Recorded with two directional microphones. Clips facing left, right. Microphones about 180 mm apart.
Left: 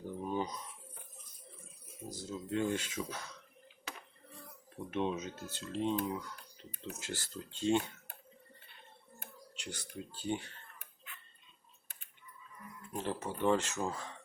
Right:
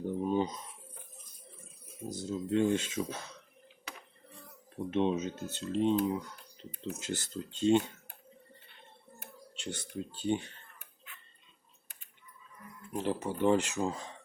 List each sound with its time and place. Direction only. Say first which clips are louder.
0.3 s a sound: right 5 dB; 25° right (ahead or behind)
2.0 s speech: right 6 dB; 25° right (ahead or behind)
4.9 s speech: right 6 dB; 25° right (ahead or behind)
9.6 s speech: right 6 dB; 25° right (ahead or behind)
12.9 s speech: right 5 dB; 15° right (ahead or behind)